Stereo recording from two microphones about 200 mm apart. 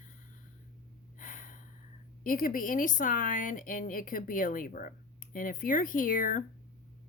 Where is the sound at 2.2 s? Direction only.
45° left (ahead or behind).